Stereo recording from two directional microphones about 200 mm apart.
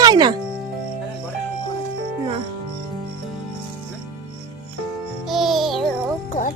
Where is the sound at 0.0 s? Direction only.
20° right (ahead or behind).